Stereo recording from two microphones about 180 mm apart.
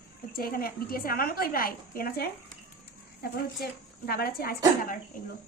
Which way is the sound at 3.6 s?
60° left (ahead or behind).